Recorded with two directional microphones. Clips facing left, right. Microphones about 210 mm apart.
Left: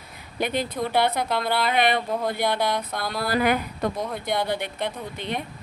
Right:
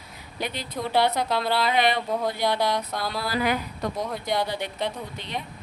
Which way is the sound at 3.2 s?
55° left (ahead or behind).